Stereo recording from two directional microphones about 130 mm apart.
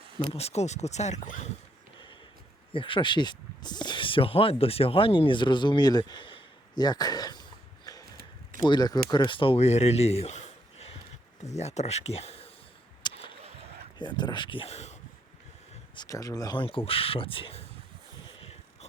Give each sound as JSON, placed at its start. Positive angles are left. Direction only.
{"t": 0.2, "sound": "speech", "side_deg": 50}
{"t": 2.7, "sound": "speech", "side_deg": 40}
{"t": 7.9, "sound": "a sound", "side_deg": 30}
{"t": 8.6, "sound": "speech", "side_deg": 30}
{"t": 13.0, "sound": "a sound", "side_deg": 35}
{"t": 14.0, "sound": "speech", "side_deg": 35}
{"t": 16.0, "sound": "speech", "side_deg": 25}
{"t": 16.6, "sound": "speech", "side_deg": 45}
{"t": 18.3, "sound": "a sound", "side_deg": 50}